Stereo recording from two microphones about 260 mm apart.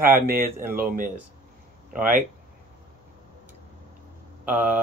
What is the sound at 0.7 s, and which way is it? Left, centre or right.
Speech, right.